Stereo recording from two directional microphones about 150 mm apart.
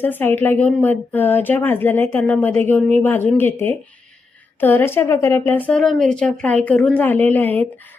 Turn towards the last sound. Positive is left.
turn(degrees=10)  # may be behind; listen again after turning